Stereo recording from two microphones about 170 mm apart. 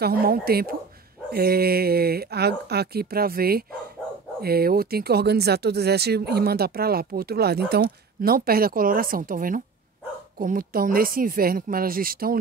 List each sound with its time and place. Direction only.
0.0 s speech: 60° right (ahead or behind)